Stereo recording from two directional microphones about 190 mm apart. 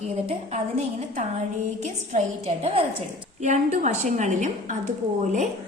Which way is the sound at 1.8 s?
35° right (ahead or behind).